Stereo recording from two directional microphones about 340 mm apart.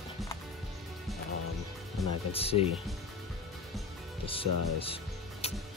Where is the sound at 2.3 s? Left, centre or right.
Centre.